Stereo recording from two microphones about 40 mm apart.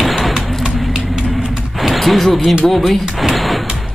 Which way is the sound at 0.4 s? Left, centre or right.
Centre.